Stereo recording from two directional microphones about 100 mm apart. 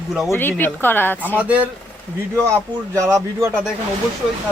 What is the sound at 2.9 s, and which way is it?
Speech, 30° right (ahead or behind).